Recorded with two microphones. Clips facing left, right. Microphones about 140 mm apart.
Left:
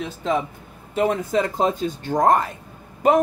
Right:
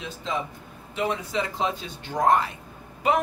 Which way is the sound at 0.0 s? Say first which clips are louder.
Left 7 dB; 55° left (ahead or behind).